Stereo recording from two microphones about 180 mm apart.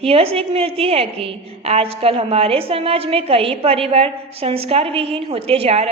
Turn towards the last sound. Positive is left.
turn(degrees=-35)  # may be behind; listen again after turning